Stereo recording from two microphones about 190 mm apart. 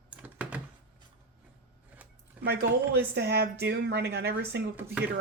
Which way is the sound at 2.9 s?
60° right (ahead or behind).